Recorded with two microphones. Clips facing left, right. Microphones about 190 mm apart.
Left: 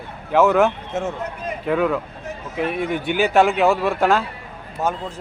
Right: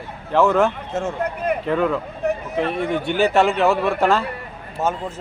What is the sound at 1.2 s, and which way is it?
Speech, 60° right (ahead or behind).